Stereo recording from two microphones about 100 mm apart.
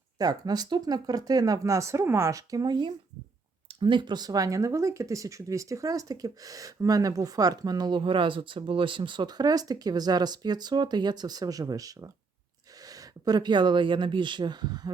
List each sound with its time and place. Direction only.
0.2 s speech: 40° right (ahead or behind)
3.7 s speech: 60° right (ahead or behind)